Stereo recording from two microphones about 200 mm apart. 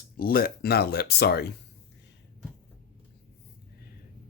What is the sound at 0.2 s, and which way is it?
Speech, 45° left (ahead or behind).